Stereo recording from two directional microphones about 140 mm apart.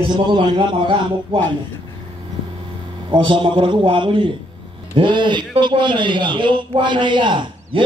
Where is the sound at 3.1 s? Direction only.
35° right (ahead or behind).